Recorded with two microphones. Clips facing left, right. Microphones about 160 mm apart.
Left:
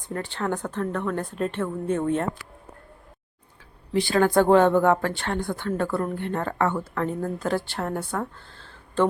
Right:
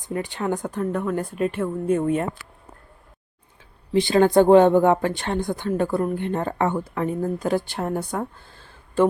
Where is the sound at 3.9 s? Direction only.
20° right (ahead or behind).